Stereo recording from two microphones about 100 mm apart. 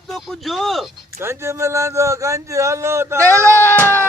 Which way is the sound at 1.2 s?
25° right (ahead or behind).